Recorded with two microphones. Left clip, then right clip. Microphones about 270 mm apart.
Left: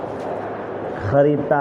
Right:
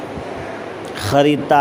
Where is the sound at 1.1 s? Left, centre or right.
Right.